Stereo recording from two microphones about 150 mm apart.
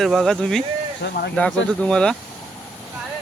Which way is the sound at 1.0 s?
90° left.